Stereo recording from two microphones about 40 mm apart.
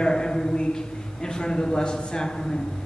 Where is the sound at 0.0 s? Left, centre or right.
Centre.